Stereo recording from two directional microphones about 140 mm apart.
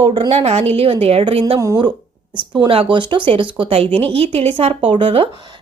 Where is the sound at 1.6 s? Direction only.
20° right (ahead or behind).